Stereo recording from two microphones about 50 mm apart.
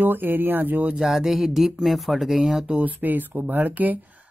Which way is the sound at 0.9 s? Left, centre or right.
Centre.